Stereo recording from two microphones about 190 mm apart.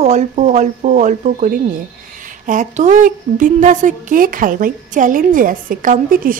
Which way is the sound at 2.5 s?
40° right (ahead or behind).